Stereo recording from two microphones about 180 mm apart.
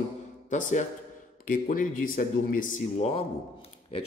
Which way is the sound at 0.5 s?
45° left (ahead or behind).